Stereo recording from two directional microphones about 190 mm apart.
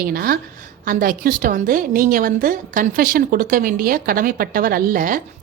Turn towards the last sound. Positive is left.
turn(degrees=-45)  # may be behind; listen again after turning